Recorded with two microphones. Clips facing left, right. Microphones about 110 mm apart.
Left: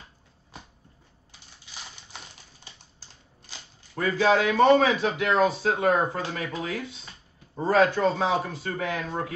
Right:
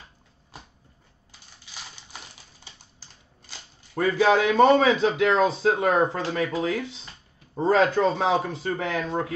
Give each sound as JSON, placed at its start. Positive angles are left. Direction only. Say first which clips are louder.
{"t": 3.9, "sound": "speech", "louder": "right 2 dB", "side_deg": -25}